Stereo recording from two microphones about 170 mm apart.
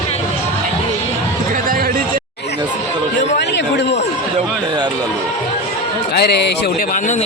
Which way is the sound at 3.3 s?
80° left.